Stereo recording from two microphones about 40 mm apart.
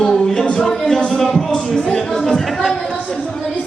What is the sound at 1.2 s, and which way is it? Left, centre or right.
Speech, centre.